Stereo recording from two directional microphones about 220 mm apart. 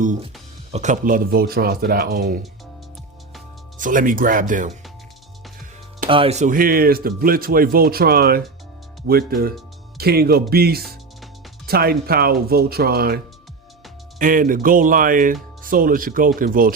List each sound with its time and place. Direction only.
0.7 s speech: 35° right (ahead or behind)
3.8 s speech: 35° right (ahead or behind)
6.1 s speech: 25° right (ahead or behind); by 13.1 s 45° right (ahead or behind)
14.2 s speech: 40° right (ahead or behind)